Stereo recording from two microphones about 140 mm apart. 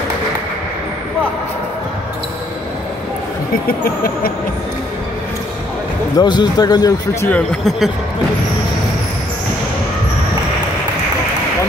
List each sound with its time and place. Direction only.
3.6 s speech: 90° left
6.1 s speech: 30° left (ahead or behind)
7.2 s speech: 10° left (ahead or behind)